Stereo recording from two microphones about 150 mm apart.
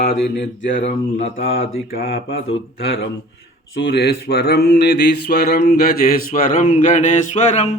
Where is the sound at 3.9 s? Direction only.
90° left.